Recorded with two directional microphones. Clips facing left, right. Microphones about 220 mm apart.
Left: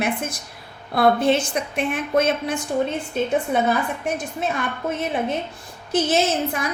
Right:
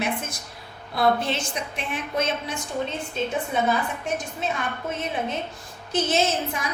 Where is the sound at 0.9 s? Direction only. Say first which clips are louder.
Left 5 dB; 55° left (ahead or behind).